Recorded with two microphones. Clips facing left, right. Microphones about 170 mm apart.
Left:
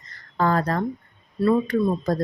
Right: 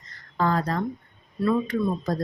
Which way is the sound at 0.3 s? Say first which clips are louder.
Left 2 dB; 55° left (ahead or behind).